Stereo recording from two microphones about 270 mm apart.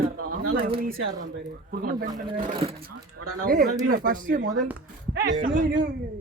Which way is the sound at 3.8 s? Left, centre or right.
Right.